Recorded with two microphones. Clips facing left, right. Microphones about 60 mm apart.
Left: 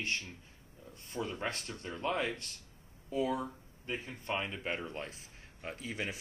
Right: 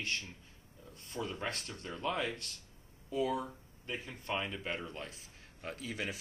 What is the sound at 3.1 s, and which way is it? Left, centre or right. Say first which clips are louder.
Speech: left 1 dB; centre.